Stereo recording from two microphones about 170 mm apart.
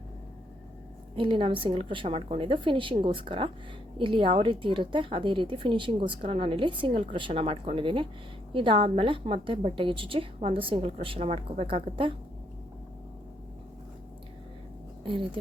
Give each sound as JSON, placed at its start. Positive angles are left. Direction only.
{"t": 1.1, "sound": "a woman's voice", "side_deg": -30}